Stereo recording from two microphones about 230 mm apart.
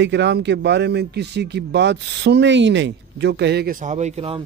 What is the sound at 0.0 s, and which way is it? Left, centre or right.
Speech, right.